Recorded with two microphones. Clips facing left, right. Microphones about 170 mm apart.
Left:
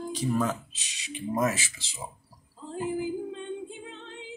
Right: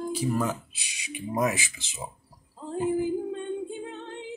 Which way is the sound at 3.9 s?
55° right (ahead or behind).